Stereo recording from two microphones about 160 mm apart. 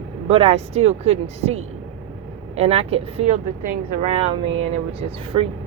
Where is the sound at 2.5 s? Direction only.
40° right (ahead or behind).